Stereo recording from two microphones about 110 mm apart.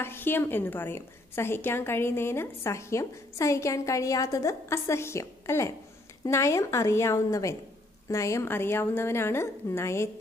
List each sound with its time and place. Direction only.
0.0 s a woman's voice: 20° left (ahead or behind)